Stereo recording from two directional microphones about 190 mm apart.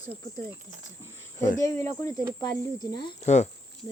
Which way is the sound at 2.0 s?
15° left (ahead or behind).